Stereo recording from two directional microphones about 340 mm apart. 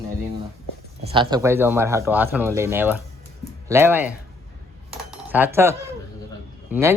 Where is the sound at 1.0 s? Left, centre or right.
Centre.